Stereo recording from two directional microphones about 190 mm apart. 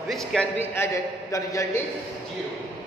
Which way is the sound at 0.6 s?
15° left (ahead or behind).